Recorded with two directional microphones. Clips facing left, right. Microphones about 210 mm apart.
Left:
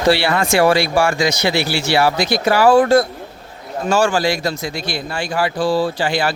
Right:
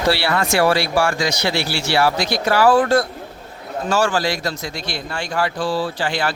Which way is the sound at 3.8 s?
15° left (ahead or behind).